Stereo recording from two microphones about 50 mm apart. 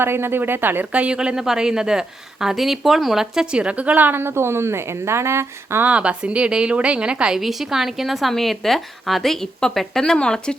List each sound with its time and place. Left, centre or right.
0.0 s speech: right
0.9 s speech: right; by 3.4 s centre
3.4 s a woman's voice: centre; by 4.2 s right
4.2 s a woman's voice: right
5.8 s a woman's voice: right
7.3 s a woman's voice: centre